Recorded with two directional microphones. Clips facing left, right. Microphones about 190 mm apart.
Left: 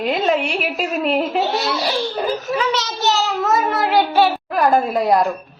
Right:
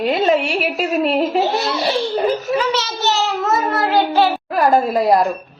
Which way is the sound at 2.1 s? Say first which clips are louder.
Right 3 dB; centre (ahead or behind).